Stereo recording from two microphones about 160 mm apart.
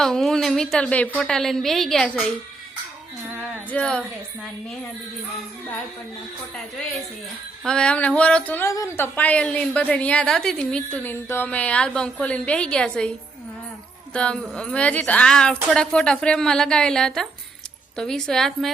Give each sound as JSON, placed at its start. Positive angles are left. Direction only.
{"t": 0.0, "sound": "a woman's voice", "side_deg": 0}
{"t": 3.7, "sound": "a woman's voice", "side_deg": 5}
{"t": 7.6, "sound": "a woman's voice", "side_deg": 5}
{"t": 8.7, "sound": "a woman's voice", "side_deg": 20}
{"t": 9.1, "sound": "a woman's voice", "side_deg": 10}